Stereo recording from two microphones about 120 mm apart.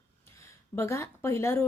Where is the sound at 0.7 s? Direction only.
20° left (ahead or behind).